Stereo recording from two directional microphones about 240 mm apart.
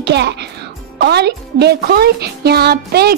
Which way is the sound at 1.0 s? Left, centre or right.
Right.